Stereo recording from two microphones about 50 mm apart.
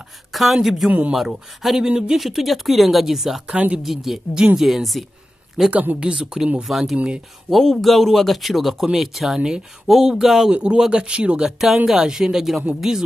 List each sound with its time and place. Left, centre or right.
0.3 s a sound: centre
0.6 s a man's voice: centre
0.8 s speech: right
1.1 s a man's voice: centre
3.5 s speech: right
3.8 s a man's voice: centre
5.7 s speech: right
6.7 s a man's voice: centre
10.5 s speech: right
11.6 s speech: centre